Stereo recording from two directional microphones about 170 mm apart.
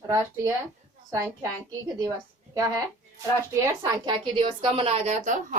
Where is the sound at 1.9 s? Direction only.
20° right (ahead or behind).